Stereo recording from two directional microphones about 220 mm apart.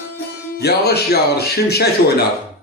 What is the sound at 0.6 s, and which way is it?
Speech, 45° left (ahead or behind).